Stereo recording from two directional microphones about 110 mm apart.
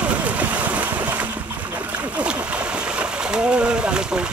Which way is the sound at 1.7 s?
15° right (ahead or behind).